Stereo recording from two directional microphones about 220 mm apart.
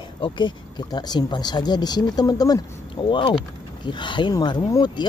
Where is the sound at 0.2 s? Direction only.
20° left (ahead or behind).